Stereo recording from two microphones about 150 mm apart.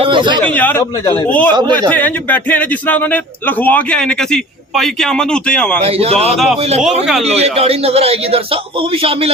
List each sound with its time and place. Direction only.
0.0 s a sound: 35° right (ahead or behind)
0.4 s speech: 10° left (ahead or behind)
5.8 s a man's voice: 40° right (ahead or behind)